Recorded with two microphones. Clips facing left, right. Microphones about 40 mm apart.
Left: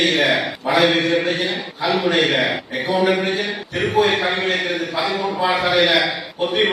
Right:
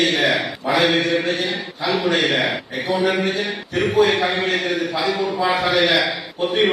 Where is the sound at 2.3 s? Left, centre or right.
Centre.